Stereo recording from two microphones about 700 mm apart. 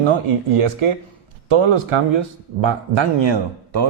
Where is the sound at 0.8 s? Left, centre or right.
Right.